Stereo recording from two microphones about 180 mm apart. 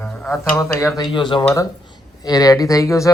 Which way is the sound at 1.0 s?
25° left (ahead or behind).